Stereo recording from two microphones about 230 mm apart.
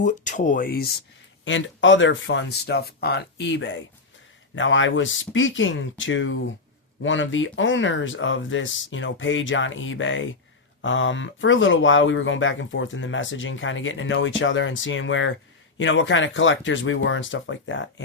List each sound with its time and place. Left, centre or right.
0.0 s speech: left
1.5 s speech: left